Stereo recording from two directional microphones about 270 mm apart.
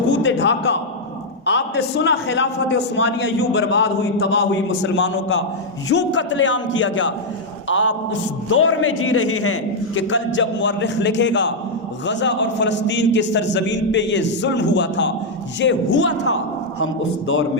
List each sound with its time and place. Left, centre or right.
0.1 s a man's voice: left